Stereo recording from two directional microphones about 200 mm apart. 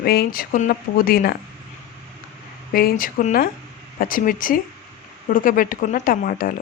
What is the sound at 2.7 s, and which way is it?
Speech, 45° left (ahead or behind).